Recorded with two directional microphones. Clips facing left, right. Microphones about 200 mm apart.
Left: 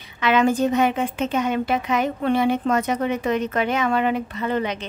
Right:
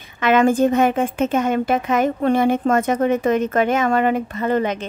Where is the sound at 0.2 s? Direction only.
50° right (ahead or behind).